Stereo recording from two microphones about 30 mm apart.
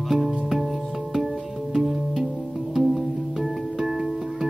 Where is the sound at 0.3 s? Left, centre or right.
Centre.